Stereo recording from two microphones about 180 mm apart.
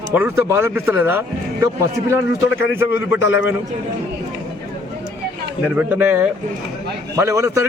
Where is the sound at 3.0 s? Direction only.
90° left.